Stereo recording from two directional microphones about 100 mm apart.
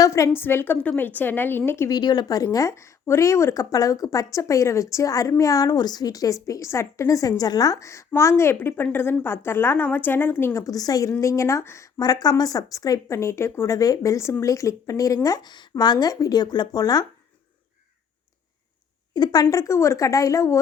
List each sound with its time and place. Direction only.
0.0 s a sound: 30° left (ahead or behind)
0.3 s a woman's voice: 20° left (ahead or behind)
1.9 s a woman's voice: 45° left (ahead or behind); by 10.6 s 20° left (ahead or behind)
10.6 s a woman's voice: 40° left (ahead or behind)
11.9 s speech: 40° left (ahead or behind)
19.1 s speech: 45° left (ahead or behind)